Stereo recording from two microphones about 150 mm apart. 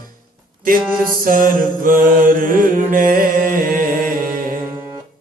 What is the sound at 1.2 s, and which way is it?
Mantra, 65° right (ahead or behind).